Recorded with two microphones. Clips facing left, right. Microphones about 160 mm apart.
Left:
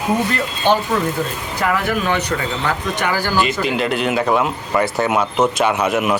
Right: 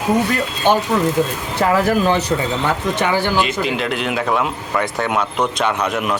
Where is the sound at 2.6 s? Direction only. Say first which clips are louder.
Right 1 dB; 25° right (ahead or behind).